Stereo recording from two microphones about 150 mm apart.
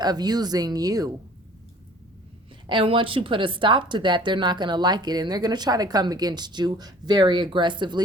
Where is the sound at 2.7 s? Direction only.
35° right (ahead or behind).